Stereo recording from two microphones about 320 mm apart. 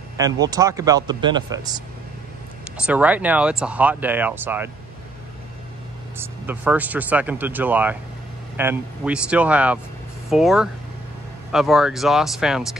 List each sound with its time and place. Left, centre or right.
0.2 s speech: centre
6.1 s speech: centre